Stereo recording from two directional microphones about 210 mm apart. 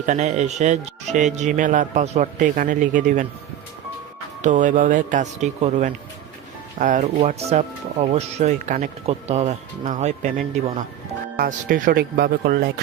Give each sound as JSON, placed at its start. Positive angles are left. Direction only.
{"t": 0.0, "sound": "speech", "side_deg": -35}
{"t": 4.4, "sound": "speech", "side_deg": -35}